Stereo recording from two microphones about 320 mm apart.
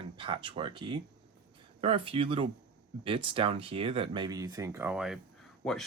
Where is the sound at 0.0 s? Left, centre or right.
Centre.